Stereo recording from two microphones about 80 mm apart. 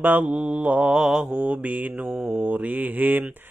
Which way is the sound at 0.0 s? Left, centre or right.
Centre.